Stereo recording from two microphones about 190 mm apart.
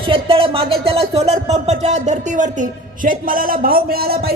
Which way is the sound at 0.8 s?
30° right (ahead or behind).